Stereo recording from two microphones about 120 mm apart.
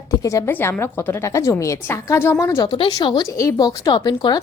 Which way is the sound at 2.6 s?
45° left (ahead or behind).